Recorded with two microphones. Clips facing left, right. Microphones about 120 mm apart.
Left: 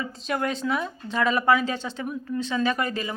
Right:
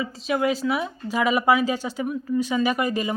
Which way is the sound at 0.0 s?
5° right (ahead or behind).